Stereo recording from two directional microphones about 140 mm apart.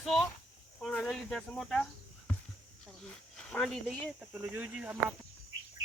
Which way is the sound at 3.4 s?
5° left (ahead or behind).